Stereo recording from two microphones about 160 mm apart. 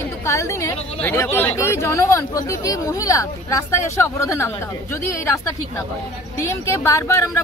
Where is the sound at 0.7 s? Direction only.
40° left (ahead or behind).